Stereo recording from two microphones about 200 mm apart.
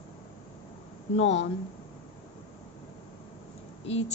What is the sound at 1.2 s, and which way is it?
Speech, 30° left (ahead or behind).